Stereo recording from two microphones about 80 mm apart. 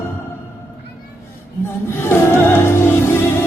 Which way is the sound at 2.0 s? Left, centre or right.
Left.